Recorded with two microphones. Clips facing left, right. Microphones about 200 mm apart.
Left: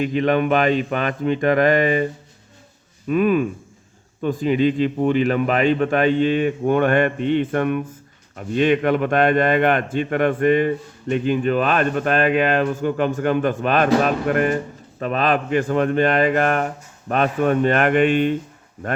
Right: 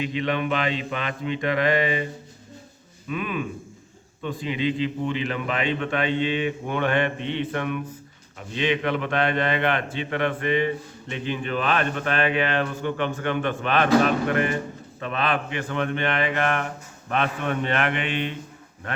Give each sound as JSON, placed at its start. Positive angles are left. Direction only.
{"t": 0.0, "sound": "speech", "side_deg": 45}
{"t": 3.1, "sound": "speech", "side_deg": 45}